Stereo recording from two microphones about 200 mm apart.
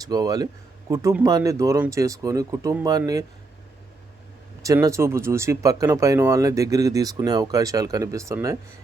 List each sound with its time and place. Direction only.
0.0 s speech: 20° right (ahead or behind)
4.6 s speech: 15° right (ahead or behind)